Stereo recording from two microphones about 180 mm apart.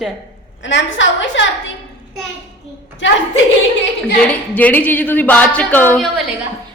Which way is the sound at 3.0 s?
90° left.